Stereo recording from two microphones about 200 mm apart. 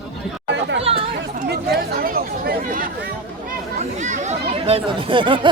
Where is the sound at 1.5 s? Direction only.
50° right (ahead or behind).